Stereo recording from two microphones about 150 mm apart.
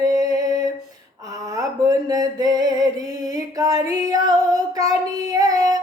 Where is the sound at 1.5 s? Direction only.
25° right (ahead or behind).